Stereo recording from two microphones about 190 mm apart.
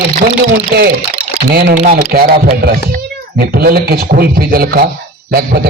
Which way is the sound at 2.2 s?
50° right (ahead or behind).